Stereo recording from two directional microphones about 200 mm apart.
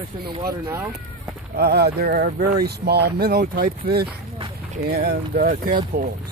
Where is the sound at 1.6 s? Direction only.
50° right (ahead or behind).